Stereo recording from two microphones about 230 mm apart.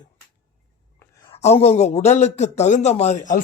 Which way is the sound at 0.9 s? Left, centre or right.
Centre.